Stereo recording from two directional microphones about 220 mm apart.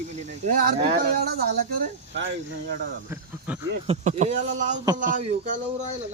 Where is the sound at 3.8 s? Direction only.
30° right (ahead or behind).